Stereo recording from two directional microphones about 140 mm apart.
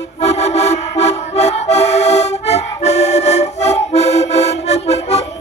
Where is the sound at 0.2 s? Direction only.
50° left (ahead or behind).